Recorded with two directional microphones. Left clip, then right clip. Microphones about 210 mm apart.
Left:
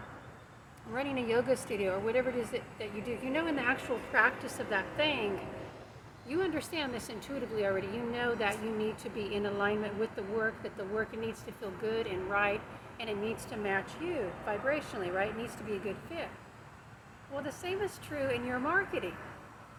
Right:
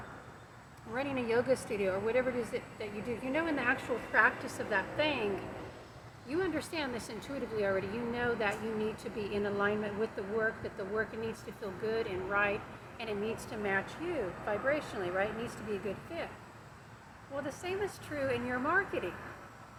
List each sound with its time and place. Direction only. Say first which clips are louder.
0.9 s speech: left 1 dB; 10° left (ahead or behind)
17.4 s speech: left 1 dB; 10° left (ahead or behind)